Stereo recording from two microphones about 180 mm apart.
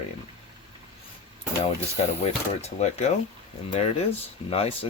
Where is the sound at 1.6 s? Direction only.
35° left (ahead or behind).